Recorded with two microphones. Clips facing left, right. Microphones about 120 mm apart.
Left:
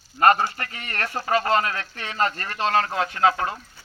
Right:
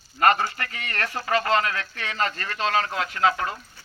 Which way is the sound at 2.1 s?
40° left (ahead or behind).